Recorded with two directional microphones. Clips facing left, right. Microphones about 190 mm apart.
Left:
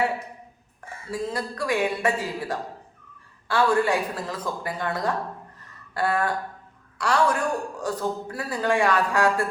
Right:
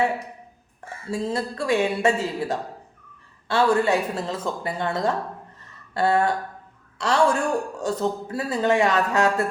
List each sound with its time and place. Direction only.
1.1 s speech: 25° right (ahead or behind)